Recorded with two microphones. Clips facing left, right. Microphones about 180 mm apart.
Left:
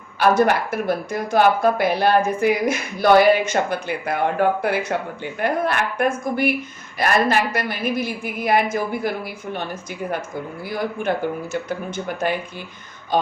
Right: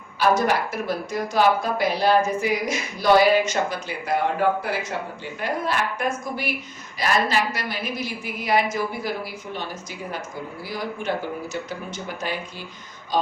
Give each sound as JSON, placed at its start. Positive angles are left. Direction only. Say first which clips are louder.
{"t": 0.2, "sound": "a woman's voice", "louder": "left 3 dB", "side_deg": 55}
{"t": 10.7, "sound": "a man's voice", "louder": "left 4 dB", "side_deg": 55}